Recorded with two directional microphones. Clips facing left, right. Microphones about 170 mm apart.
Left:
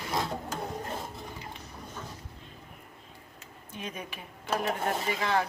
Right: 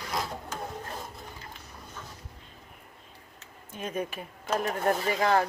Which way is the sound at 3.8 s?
45° right (ahead or behind).